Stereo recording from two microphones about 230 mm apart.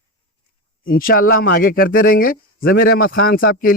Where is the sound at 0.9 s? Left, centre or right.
Left.